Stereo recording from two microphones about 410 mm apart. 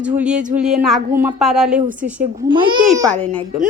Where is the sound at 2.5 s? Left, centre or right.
Centre.